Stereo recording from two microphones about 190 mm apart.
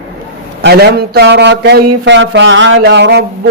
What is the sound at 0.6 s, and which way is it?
Speech, 60° right (ahead or behind).